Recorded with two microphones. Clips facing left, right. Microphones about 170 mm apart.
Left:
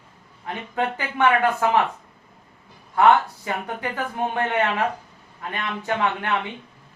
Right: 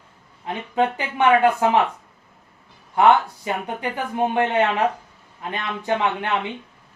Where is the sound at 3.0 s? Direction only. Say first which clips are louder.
Right 1 dB; 20° right (ahead or behind).